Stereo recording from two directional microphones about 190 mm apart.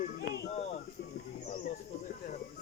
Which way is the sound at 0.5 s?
35° left (ahead or behind).